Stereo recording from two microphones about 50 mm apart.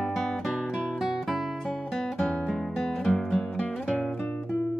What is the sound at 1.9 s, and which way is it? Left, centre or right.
Music, centre.